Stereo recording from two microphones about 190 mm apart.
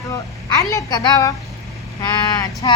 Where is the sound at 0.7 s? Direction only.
20° left (ahead or behind).